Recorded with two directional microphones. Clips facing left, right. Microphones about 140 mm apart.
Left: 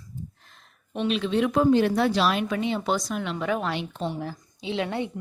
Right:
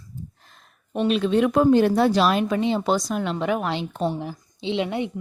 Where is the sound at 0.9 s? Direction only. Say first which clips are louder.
Right 4 dB; 45° right (ahead or behind).